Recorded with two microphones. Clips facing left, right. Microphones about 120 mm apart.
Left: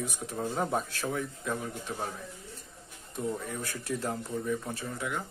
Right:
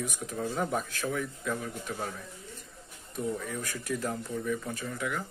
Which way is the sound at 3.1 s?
25° left (ahead or behind).